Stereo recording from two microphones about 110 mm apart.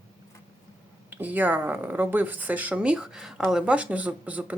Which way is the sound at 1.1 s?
15° right (ahead or behind).